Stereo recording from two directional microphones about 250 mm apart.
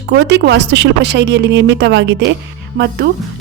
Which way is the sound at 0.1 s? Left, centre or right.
Right.